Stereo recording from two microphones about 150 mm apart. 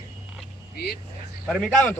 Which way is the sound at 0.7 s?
90° left.